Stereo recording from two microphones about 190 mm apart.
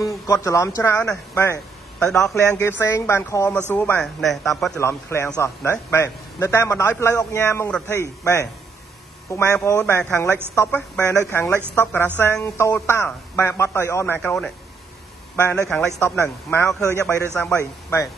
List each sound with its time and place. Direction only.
0.0 s speech: 15° left (ahead or behind)
2.0 s a man's voice: 5° left (ahead or behind)
2.3 s a man's voice: 15° left (ahead or behind)
4.7 s a man's voice: 15° left (ahead or behind)